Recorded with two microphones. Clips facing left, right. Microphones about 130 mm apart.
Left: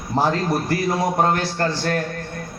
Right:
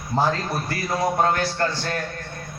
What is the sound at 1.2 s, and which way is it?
Speech, 30° left (ahead or behind).